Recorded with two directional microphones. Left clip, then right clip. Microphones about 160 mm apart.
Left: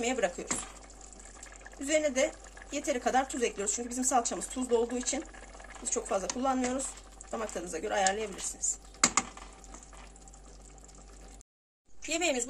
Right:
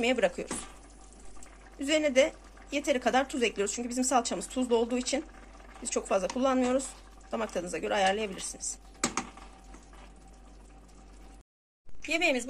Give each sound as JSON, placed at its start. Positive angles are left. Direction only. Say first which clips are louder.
{"t": 0.0, "sound": "speech", "louder": "right 4 dB", "side_deg": -15}
{"t": 1.8, "sound": "speech", "louder": "right 3 dB", "side_deg": -15}
{"t": 12.1, "sound": "speech", "louder": "right 3 dB", "side_deg": -10}